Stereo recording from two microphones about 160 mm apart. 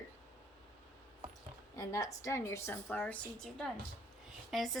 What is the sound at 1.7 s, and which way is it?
A woman's voice, 15° left (ahead or behind).